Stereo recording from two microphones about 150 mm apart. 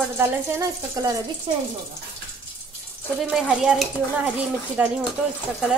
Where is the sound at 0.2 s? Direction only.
15° right (ahead or behind).